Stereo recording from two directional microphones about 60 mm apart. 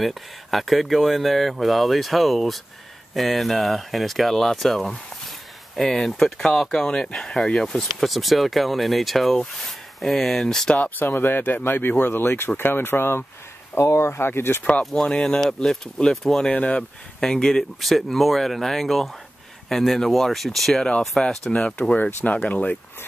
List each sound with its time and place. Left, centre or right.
0.0 s speech: centre
10.7 s speech: left
14.6 s speech: centre
16.5 s speech: left
17.7 s speech: centre; by 22.8 s left